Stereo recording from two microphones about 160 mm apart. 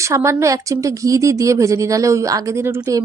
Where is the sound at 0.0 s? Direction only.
20° right (ahead or behind).